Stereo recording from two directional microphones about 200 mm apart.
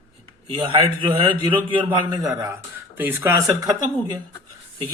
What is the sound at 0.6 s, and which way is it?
A man's voice, 25° right (ahead or behind).